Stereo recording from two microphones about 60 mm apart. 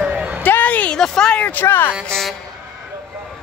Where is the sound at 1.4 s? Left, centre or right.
Left.